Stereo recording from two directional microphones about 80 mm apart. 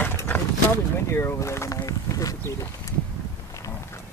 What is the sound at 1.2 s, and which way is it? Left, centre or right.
Speech, left.